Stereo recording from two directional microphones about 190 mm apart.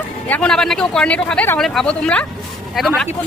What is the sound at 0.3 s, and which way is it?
Speech, 5° left (ahead or behind).